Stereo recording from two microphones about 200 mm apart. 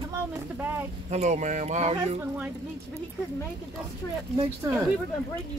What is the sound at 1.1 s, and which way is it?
Speech, 35° right (ahead or behind).